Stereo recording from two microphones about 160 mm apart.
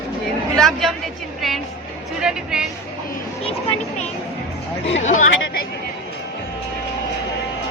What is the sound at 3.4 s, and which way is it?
Speech, 35° left (ahead or behind).